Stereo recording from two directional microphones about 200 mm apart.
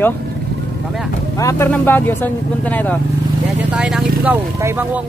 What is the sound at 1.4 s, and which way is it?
Speech, 15° left (ahead or behind).